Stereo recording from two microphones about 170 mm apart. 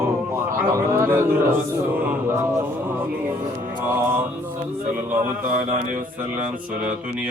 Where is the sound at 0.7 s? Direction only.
15° right (ahead or behind).